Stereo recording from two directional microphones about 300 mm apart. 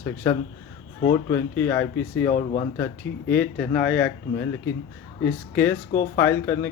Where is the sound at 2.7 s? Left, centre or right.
Centre.